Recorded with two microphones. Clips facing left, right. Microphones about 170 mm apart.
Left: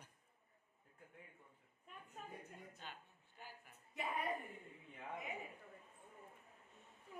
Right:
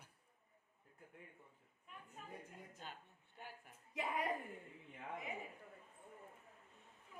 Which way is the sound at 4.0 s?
90° right.